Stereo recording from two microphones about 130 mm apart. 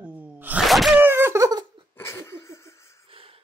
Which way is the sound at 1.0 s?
20° right (ahead or behind).